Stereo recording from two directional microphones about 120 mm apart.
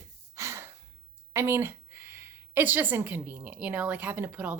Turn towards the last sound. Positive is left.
turn(degrees=-10)  # may be behind; listen again after turning